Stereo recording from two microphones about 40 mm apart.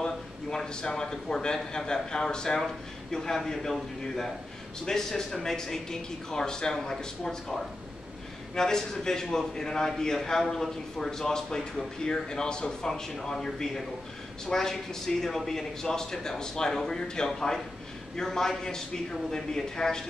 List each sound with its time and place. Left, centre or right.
0.0 s a man's voice: centre